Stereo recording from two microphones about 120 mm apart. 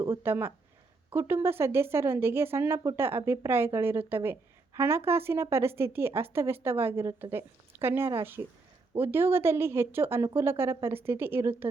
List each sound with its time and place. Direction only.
0.0 s speech: 20° right (ahead or behind)